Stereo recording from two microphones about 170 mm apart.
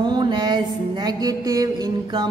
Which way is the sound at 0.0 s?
25° right (ahead or behind).